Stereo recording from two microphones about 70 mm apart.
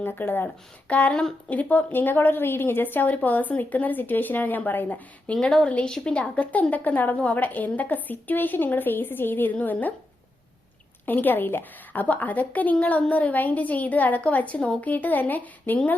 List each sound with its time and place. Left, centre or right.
0.0 s a woman's voice: left
5.3 s a woman's voice: centre
11.0 s a woman's voice: left